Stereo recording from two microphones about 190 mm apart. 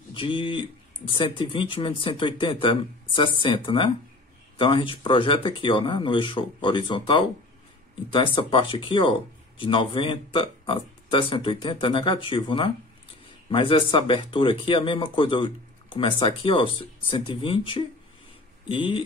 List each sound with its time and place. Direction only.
0.1 s speech: 25° left (ahead or behind)